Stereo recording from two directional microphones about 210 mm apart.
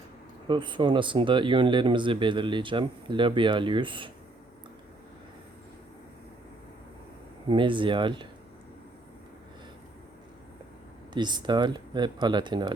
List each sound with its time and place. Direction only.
0.4 s speech: 20° right (ahead or behind)
7.4 s speech: 25° right (ahead or behind)
11.1 s speech: 20° right (ahead or behind)